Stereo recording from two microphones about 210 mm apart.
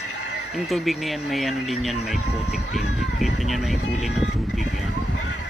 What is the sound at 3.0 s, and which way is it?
Speech, centre (ahead or behind).